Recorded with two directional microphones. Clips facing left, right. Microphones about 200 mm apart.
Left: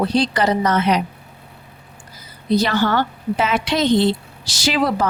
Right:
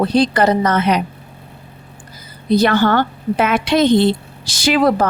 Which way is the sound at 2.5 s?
55° right (ahead or behind).